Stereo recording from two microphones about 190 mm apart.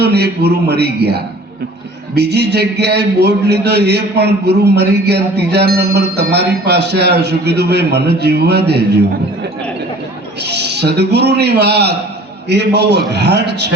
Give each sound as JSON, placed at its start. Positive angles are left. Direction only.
{"t": 0.0, "sound": "a man's voice", "side_deg": -60}
{"t": 10.4, "sound": "a man's voice", "side_deg": -60}